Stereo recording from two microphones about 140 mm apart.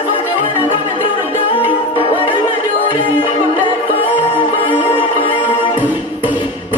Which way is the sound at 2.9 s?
35° left (ahead or behind).